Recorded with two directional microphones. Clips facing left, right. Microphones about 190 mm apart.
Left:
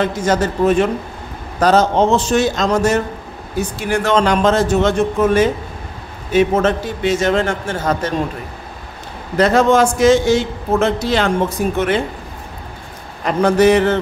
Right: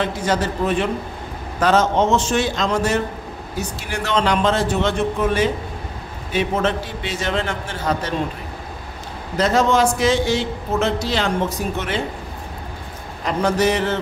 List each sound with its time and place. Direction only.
0.0 s a man's voice: 45° left (ahead or behind)
9.4 s a man's voice: 55° left (ahead or behind)
13.2 s a man's voice: 55° left (ahead or behind)